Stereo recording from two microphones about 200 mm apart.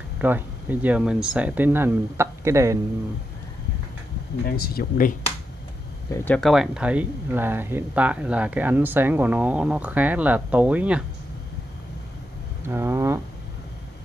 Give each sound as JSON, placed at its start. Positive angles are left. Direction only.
{"t": 0.2, "sound": "speech", "side_deg": -10}
{"t": 4.6, "sound": "speech", "side_deg": 45}
{"t": 6.1, "sound": "speech", "side_deg": 5}
{"t": 12.6, "sound": "speech", "side_deg": -10}